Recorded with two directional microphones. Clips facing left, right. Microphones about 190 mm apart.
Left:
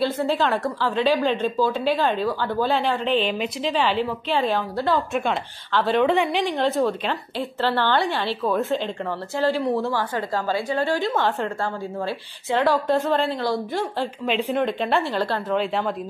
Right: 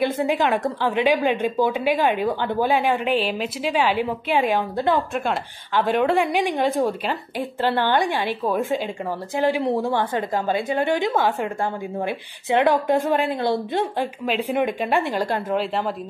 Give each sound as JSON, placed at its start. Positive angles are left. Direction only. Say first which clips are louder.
{"t": 0.0, "sound": "a woman's voice", "louder": "right 1 dB", "side_deg": -15}
{"t": 14.2, "sound": "speech", "louder": "left 1 dB", "side_deg": 0}
{"t": 14.6, "sound": "a woman's voice", "louder": "right 1 dB", "side_deg": -15}